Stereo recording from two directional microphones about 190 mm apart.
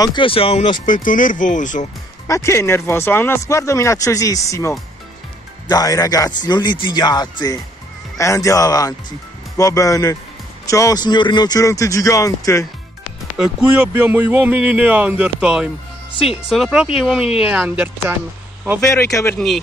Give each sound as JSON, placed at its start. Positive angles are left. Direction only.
{"t": 0.0, "sound": "speech", "side_deg": 25}
{"t": 2.2, "sound": "speech", "side_deg": 15}
{"t": 13.4, "sound": "speech", "side_deg": -10}
{"t": 18.8, "sound": "speech", "side_deg": 15}